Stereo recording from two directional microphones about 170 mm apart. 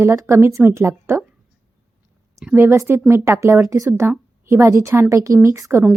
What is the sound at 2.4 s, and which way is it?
A woman's voice, 10° right (ahead or behind).